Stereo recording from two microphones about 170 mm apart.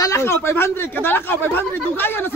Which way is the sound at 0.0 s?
15° left (ahead or behind).